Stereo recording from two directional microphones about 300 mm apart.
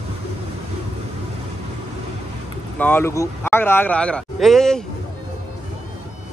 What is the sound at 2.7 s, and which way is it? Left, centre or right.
Speech, centre.